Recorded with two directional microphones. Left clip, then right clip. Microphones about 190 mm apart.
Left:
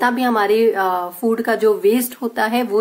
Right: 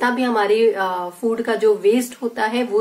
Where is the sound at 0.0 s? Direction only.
45° left (ahead or behind).